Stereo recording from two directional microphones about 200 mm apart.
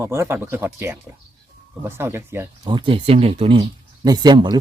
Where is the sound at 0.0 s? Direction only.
15° right (ahead or behind).